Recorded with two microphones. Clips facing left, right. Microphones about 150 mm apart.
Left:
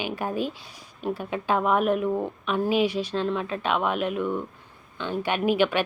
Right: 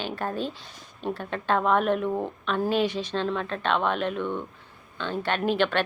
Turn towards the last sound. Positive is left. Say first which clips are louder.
# left 2 dB
turn(degrees=10)  # may be behind; listen again after turning